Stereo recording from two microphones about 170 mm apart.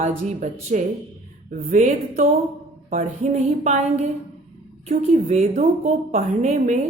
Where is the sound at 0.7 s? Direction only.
45° right (ahead or behind).